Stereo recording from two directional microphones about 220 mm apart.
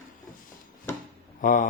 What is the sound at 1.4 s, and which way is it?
Speech, 35° left (ahead or behind).